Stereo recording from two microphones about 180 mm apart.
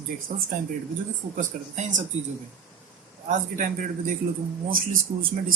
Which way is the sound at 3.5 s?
45° right (ahead or behind).